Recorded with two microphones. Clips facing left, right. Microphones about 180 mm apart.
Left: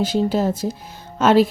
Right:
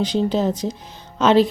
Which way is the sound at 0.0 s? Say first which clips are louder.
Even; 5° left (ahead or behind).